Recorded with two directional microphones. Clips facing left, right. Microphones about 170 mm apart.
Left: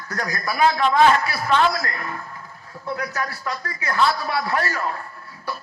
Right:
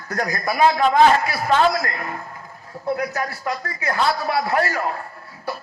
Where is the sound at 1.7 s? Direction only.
25° right (ahead or behind).